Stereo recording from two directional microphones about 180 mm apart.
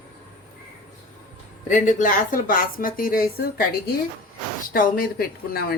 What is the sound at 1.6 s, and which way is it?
A woman's voice, 45° left (ahead or behind).